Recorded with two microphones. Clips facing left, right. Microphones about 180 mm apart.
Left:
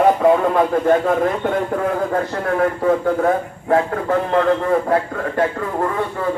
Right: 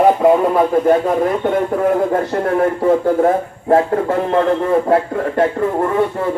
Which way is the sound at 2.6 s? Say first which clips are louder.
Right 1 dB; 25° right (ahead or behind).